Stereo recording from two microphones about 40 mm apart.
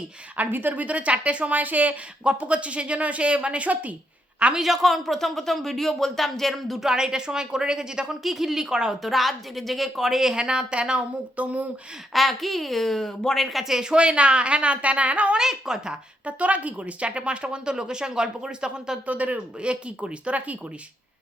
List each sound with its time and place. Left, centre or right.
0.5 s a woman's voice: right
0.9 s speech: right
4.6 s speech: centre
6.7 s a woman's voice: centre
8.2 s a woman's voice: centre
9.0 s a woman's voice: centre; by 11.4 s right
12.1 s speech: centre
13.4 s speech: centre
13.7 s a woman's voice: centre
13.9 s speech: right
15.4 s a woman's voice: centre
16.2 s speech: right
19.0 s speech: right
19.6 s speech: right